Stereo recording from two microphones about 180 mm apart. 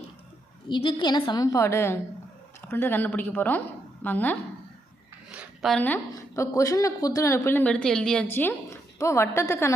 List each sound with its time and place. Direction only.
0.7 s a woman's voice: 25° left (ahead or behind); by 4.4 s 10° left (ahead or behind)
5.3 s a sound: 5° right (ahead or behind)
5.7 s a woman's voice: 10° left (ahead or behind)